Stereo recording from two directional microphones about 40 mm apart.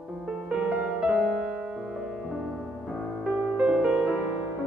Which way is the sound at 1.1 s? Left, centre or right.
Centre.